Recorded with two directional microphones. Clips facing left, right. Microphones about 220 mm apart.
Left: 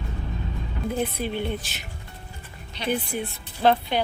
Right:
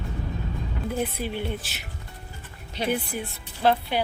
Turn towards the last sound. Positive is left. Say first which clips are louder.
# left 2 dB
turn(degrees=-5)  # may be behind; listen again after turning